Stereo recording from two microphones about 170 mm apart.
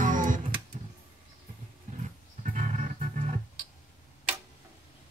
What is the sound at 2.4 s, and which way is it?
Music, 45° right (ahead or behind).